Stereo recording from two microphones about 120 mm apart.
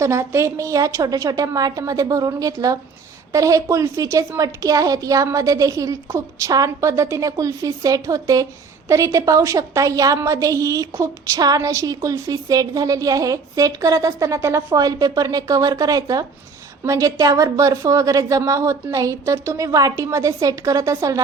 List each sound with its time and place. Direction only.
0.0 s a woman's voice: 20° right (ahead or behind)